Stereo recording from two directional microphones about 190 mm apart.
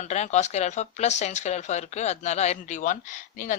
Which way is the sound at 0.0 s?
40° left (ahead or behind).